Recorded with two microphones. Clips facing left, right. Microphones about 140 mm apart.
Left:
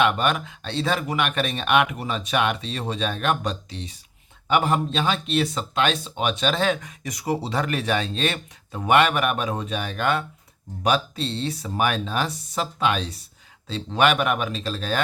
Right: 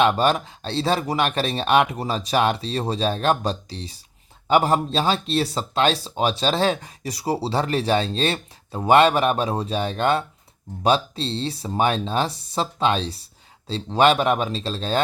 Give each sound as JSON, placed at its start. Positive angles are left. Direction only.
{"t": 0.0, "sound": "speech", "side_deg": -30}